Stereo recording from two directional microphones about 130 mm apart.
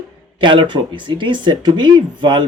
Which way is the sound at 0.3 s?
40° right (ahead or behind).